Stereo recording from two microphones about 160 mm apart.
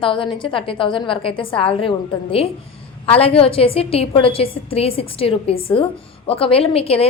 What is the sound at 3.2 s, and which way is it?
A woman's voice, 35° left (ahead or behind).